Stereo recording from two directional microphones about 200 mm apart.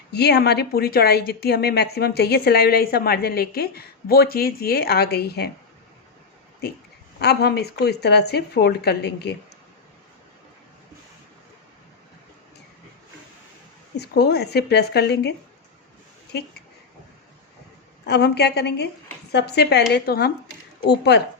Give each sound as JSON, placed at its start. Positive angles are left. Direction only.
{"t": 0.1, "sound": "speech", "side_deg": 55}
{"t": 7.2, "sound": "speech", "side_deg": 55}
{"t": 13.9, "sound": "speech", "side_deg": 55}
{"t": 18.0, "sound": "speech", "side_deg": 55}